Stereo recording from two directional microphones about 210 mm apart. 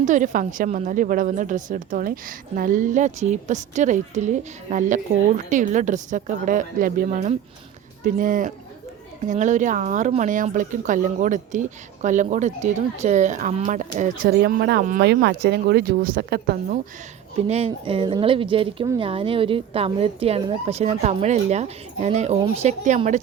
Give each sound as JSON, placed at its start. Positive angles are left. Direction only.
{"t": 0.0, "sound": "speech", "side_deg": -35}
{"t": 17.3, "sound": "speech", "side_deg": -30}